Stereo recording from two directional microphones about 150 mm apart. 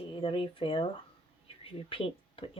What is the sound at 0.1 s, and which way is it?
Speech, 35° left (ahead or behind).